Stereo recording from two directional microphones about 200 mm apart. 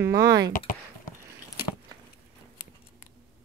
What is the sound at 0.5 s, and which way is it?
Speech, 45° left (ahead or behind).